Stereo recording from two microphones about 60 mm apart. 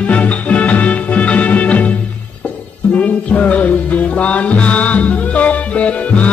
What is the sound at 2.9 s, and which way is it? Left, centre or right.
Music, left.